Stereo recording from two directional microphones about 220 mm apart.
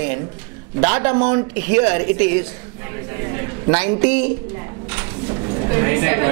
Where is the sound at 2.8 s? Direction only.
15° right (ahead or behind).